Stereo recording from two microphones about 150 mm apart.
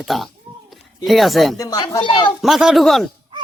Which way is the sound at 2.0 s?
35° left (ahead or behind).